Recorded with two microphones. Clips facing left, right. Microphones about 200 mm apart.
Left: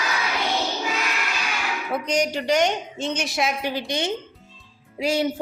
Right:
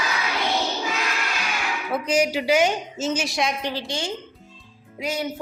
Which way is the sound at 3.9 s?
20° left (ahead or behind).